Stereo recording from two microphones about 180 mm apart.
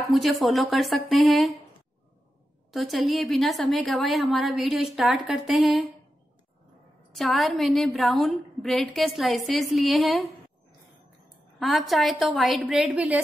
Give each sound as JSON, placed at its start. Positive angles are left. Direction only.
{"t": 0.1, "sound": "a woman's voice", "side_deg": 0}
{"t": 2.7, "sound": "a woman's voice", "side_deg": 0}
{"t": 7.2, "sound": "a woman's voice", "side_deg": 0}
{"t": 11.6, "sound": "a woman's voice", "side_deg": 0}